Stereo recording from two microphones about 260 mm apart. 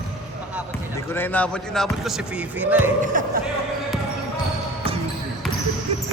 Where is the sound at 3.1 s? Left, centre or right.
Right.